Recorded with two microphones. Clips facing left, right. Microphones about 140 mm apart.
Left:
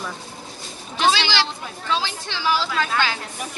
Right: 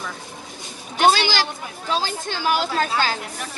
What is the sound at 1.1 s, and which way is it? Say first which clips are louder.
Speech: right 1 dB; 45° right (ahead or behind).